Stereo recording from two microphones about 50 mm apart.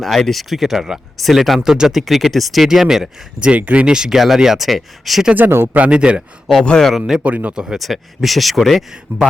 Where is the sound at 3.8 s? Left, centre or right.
Centre.